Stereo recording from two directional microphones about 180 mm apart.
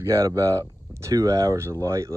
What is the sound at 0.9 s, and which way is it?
Speech, 15° right (ahead or behind).